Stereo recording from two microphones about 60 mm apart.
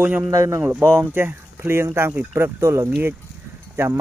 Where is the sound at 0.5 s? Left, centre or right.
Right.